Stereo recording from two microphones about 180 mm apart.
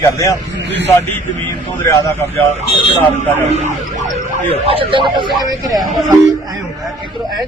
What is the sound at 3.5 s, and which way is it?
Speech, 40° right (ahead or behind).